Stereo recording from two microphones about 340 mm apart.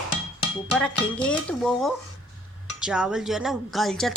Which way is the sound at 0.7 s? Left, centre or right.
Centre.